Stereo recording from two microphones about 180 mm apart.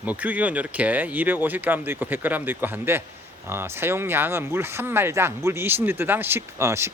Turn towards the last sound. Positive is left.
turn(degrees=-15)  # may be behind; listen again after turning